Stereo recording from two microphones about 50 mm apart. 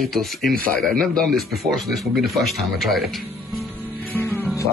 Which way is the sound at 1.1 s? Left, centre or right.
Centre.